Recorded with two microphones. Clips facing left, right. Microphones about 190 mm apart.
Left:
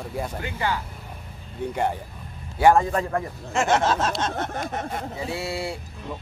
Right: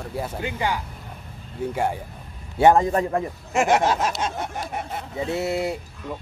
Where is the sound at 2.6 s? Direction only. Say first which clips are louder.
Right 2 dB; 20° right (ahead or behind).